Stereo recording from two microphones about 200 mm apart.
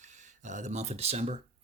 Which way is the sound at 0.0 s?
35° right (ahead or behind).